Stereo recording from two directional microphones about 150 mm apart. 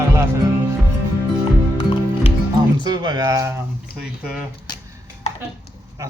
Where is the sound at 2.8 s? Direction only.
30° right (ahead or behind).